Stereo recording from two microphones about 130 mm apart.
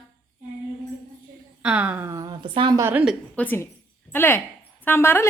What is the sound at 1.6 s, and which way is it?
Speech, 10° right (ahead or behind).